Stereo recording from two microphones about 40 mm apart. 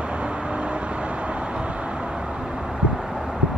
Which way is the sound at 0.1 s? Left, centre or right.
Right.